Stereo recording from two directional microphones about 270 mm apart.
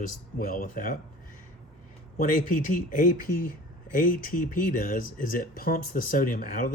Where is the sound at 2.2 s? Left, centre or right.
Left.